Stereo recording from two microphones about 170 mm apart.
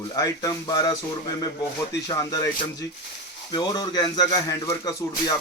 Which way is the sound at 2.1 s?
20° left (ahead or behind).